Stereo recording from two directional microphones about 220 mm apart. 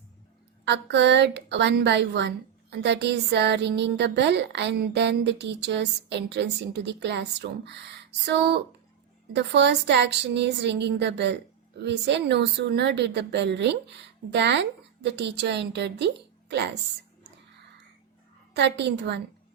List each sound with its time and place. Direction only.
0.6 s a woman's voice: 50° right (ahead or behind)
18.5 s a woman's voice: 50° right (ahead or behind)